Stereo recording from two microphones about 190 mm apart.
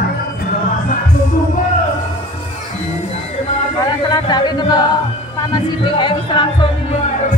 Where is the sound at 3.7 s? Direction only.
20° left (ahead or behind).